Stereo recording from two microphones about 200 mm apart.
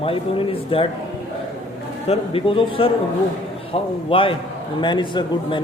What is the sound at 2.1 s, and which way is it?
Speech, 30° left (ahead or behind).